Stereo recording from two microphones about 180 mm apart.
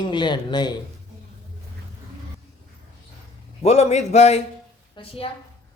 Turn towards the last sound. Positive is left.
turn(degrees=30)  # may be behind; listen again after turning